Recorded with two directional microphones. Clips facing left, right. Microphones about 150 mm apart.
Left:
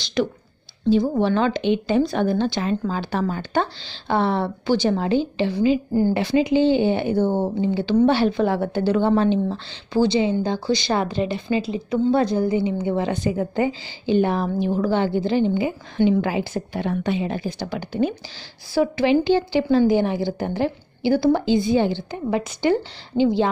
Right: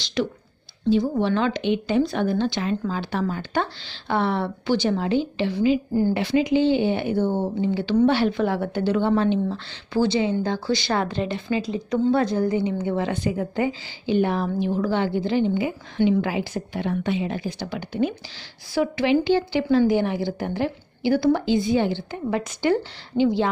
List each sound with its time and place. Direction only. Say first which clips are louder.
0.0 s a woman's voice: left 2 dB; 50° left (ahead or behind)
7.6 s a woman's voice: left 1 dB; 30° left (ahead or behind)
10.1 s a woman's voice: left 2 dB; 15° left (ahead or behind)
12.9 s a woman's voice: left 2 dB; 25° left (ahead or behind)
22.1 s a woman's voice: left 2 dB; 15° left (ahead or behind)
22.6 s a woman's voice: even; 30° left (ahead or behind)